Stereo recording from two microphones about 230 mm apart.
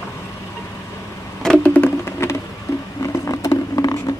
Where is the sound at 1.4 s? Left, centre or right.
Centre.